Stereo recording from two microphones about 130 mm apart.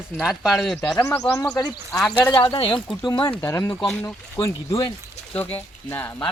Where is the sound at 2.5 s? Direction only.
45° left (ahead or behind).